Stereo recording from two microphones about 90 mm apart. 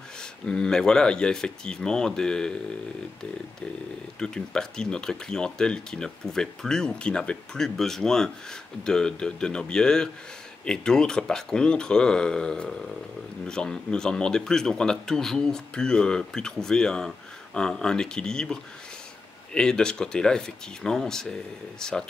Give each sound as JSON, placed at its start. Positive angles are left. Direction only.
{"t": 0.2, "sound": "speech", "side_deg": 10}
{"t": 4.2, "sound": "speech", "side_deg": 10}